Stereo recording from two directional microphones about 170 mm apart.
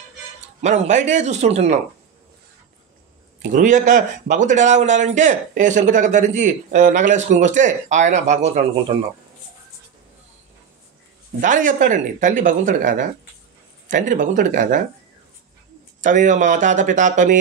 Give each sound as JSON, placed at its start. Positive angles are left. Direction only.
{"t": 0.6, "sound": "a man's voice", "side_deg": -45}
{"t": 3.5, "sound": "a man's voice", "side_deg": -50}
{"t": 11.4, "sound": "a man's voice", "side_deg": -50}
{"t": 16.0, "sound": "a man's voice", "side_deg": -50}